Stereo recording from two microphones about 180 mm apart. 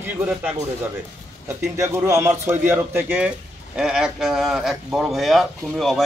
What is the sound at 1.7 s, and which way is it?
Speech, 15° right (ahead or behind).